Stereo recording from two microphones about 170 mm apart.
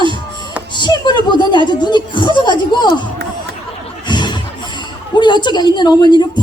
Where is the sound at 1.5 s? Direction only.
25° left (ahead or behind).